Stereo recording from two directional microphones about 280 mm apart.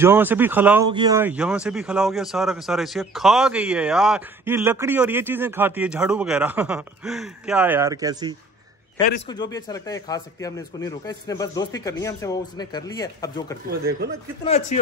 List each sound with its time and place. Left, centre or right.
0.0 s a man's voice: centre
9.3 s speech: centre
13.7 s speech: right
14.4 s speech: left